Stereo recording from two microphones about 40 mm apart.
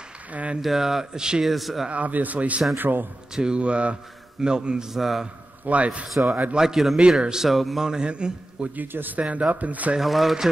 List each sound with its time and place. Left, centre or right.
0.3 s speech: right
0.6 s speech: centre
1.4 s speech: centre
1.9 s speech: right
2.7 s speech: right
3.3 s a man's voice: right
4.9 s speech: centre
5.7 s speech: right
6.5 s speech: centre
7.4 s speech: centre
7.8 s a man's voice: centre
8.7 s speech: right
9.5 s speech: right
9.9 s speech: centre